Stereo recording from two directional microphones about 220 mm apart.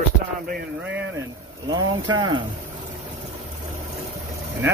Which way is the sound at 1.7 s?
20° right (ahead or behind).